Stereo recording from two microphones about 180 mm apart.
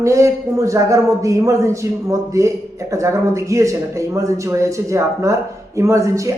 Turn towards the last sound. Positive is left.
turn(degrees=-15)  # may be behind; listen again after turning